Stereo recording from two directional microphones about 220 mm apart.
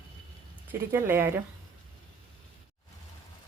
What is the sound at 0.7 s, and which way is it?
Speech, 10° right (ahead or behind).